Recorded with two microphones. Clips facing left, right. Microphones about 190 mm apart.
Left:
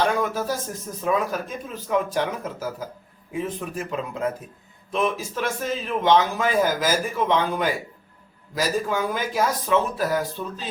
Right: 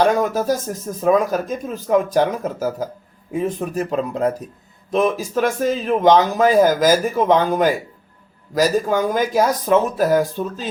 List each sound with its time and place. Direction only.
0.0 s speech: 40° right (ahead or behind)